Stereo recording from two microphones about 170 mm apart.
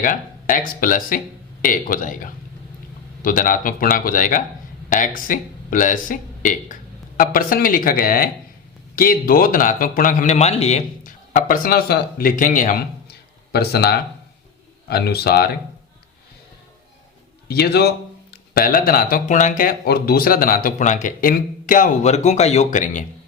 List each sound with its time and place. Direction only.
0.0 s a man's voice: 55° left (ahead or behind)
17.5 s a man's voice: 70° left (ahead or behind); by 23.0 s 45° left (ahead or behind)